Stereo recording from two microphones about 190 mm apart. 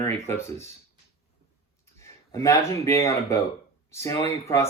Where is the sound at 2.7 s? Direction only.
15° left (ahead or behind).